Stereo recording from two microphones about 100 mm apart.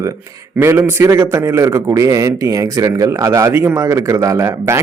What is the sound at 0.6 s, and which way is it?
A man's voice, 25° right (ahead or behind).